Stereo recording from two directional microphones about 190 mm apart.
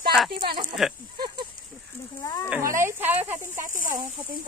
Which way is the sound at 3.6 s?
45° right (ahead or behind).